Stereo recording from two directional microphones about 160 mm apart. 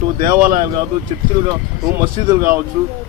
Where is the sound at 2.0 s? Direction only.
25° right (ahead or behind).